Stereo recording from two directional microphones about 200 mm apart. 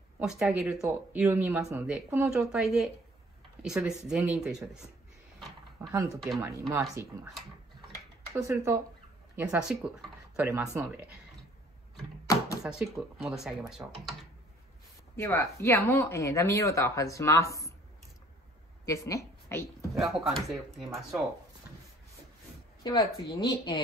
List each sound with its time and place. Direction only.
0.2 s speech: 5° right (ahead or behind)
5.8 s speech: 15° right (ahead or behind)
8.4 s speech: 15° right (ahead or behind)
12.6 s speech: centre (ahead or behind)
15.1 s speech: 15° left (ahead or behind)
18.9 s speech: 15° left (ahead or behind)
20.0 s speech: centre (ahead or behind)
22.8 s speech: 20° left (ahead or behind)